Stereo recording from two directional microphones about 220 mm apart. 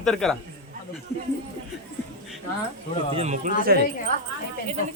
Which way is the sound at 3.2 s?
30° right (ahead or behind).